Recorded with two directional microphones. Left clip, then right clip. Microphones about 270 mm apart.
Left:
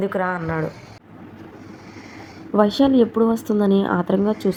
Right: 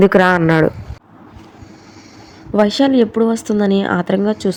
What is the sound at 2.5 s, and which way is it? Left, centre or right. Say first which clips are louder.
Speech: right 3 dB; right.